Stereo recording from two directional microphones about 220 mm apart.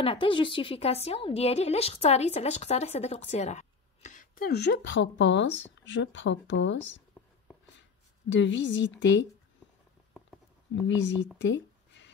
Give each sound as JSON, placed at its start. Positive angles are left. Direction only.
{"t": 0.0, "sound": "a woman's voice", "side_deg": 20}
{"t": 7.2, "sound": "writing", "side_deg": 10}
{"t": 8.3, "sound": "a woman's voice", "side_deg": 55}
{"t": 10.7, "sound": "a woman's voice", "side_deg": 55}
{"t": 11.3, "sound": "a sound", "side_deg": 55}